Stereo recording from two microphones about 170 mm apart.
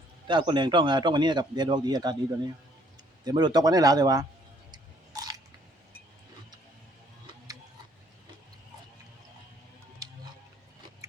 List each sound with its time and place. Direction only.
0.3 s a man's voice: 25° right (ahead or behind)
4.7 s chewing: 20° right (ahead or behind)